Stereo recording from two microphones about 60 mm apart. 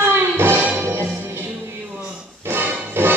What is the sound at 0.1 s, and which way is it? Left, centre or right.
Music, right.